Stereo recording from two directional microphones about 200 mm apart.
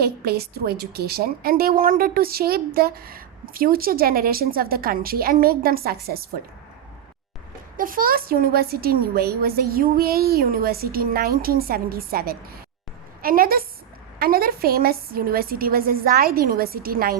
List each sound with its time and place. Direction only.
0.0 s a woman's voice: 50° right (ahead or behind)
7.8 s a woman's voice: 45° right (ahead or behind)